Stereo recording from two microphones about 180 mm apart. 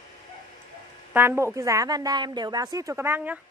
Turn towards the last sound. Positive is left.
turn(degrees=-10)  # may be behind; listen again after turning